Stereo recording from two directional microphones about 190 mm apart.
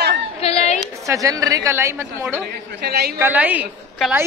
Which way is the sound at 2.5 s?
60° right (ahead or behind).